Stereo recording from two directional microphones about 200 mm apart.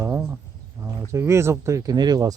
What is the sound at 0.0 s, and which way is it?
Cricket, 10° right (ahead or behind).